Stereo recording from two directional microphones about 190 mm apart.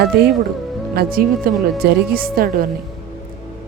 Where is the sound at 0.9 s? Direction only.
50° right (ahead or behind).